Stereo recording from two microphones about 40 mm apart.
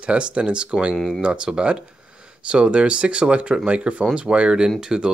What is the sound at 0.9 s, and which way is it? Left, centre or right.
Speech, centre.